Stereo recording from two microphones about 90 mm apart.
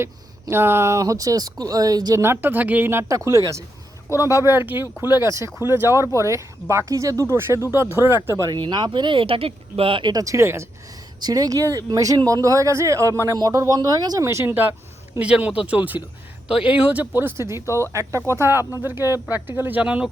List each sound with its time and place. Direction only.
0.0 s speech: 25° right (ahead or behind); by 2.1 s 45° right (ahead or behind)
2.1 s speech: 25° right (ahead or behind)
8.5 s speech: 55° right (ahead or behind); by 10.1 s 80° right
10.1 s speech: 40° right (ahead or behind)
11.2 s speech: 45° right (ahead or behind)
14.3 s speech: 30° right (ahead or behind)
15.2 s speech: 15° right (ahead or behind)
19.8 s speech: 10° right (ahead or behind)